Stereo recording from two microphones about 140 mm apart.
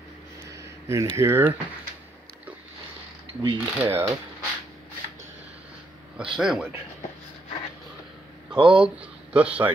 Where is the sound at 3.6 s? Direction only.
20° right (ahead or behind).